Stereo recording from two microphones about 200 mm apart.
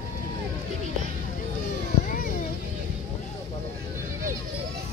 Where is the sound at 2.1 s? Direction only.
50° left (ahead or behind).